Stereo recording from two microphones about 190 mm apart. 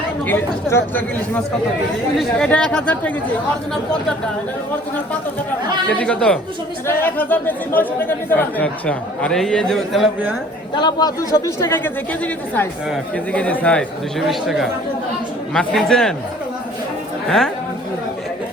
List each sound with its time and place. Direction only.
0.3 s speech: 10° left (ahead or behind)
5.9 s speech: 5° left (ahead or behind)
10.8 s speech: 20° left (ahead or behind); by 16.1 s 5° left (ahead or behind)
17.2 s a woman's voice: centre (ahead or behind)